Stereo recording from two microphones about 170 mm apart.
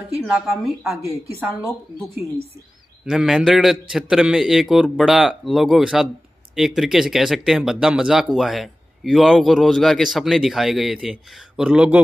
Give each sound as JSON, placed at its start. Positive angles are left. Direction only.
{"t": 0.2, "sound": "a woman's voice", "side_deg": -5}
{"t": 3.1, "sound": "speech", "side_deg": -5}